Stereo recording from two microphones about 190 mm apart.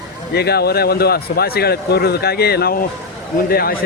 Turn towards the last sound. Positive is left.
turn(degrees=50)  # may be behind; listen again after turning